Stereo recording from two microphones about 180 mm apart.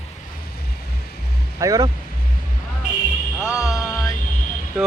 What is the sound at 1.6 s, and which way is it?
Speech, 20° right (ahead or behind).